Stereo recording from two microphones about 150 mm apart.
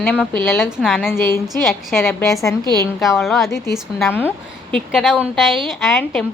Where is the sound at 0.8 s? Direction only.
Centre (ahead or behind).